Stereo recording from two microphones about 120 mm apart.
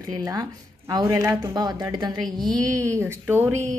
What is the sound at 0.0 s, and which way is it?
A woman's voice, 30° right (ahead or behind).